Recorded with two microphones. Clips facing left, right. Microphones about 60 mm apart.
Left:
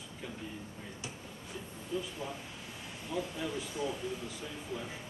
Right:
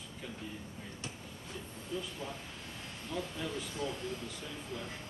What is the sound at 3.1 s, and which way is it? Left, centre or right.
Speech, centre.